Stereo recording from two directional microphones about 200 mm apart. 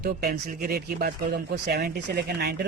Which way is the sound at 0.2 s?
50° right (ahead or behind).